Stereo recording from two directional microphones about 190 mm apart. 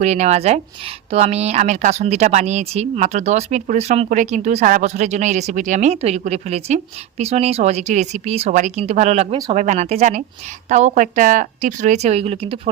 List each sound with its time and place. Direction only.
0.0 s speech: 35° right (ahead or behind)